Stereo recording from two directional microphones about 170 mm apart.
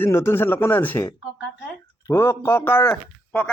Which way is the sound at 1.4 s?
5° right (ahead or behind).